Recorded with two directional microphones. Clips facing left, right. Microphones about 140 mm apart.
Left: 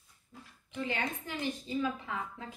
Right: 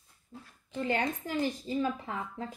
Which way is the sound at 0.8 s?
45° right (ahead or behind).